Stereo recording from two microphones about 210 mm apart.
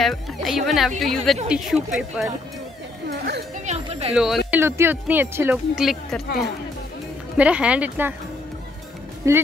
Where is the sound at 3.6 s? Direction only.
30° right (ahead or behind).